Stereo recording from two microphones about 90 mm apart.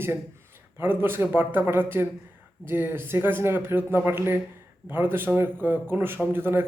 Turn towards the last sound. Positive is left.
turn(degrees=-25)  # may be behind; listen again after turning